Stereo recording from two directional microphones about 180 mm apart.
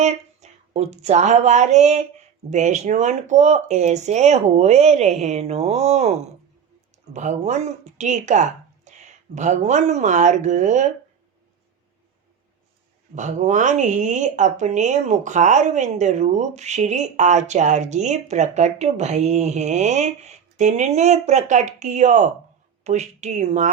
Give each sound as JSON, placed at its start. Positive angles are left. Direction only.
{"t": 0.7, "sound": "speech", "side_deg": -35}
{"t": 13.1, "sound": "speech", "side_deg": -45}